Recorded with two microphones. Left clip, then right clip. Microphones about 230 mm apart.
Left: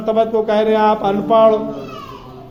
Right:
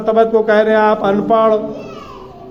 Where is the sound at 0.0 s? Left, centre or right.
Right.